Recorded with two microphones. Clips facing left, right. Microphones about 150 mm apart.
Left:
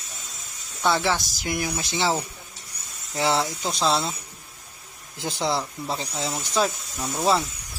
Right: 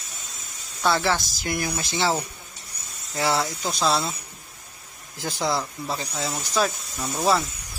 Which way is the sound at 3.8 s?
20° left (ahead or behind).